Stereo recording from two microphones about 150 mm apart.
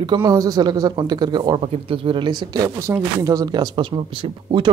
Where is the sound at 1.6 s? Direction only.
40° right (ahead or behind).